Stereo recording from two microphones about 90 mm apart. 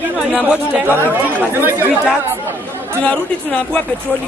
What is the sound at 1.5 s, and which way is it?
Speech, 25° right (ahead or behind).